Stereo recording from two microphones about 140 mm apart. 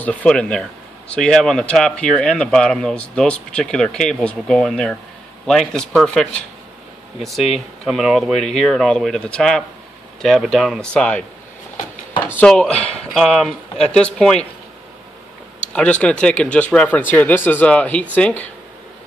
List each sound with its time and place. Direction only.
0.0 s speech: 10° left (ahead or behind)
7.2 s speech: centre (ahead or behind)
12.4 s speech: 10° left (ahead or behind)
15.7 s speech: 10° left (ahead or behind)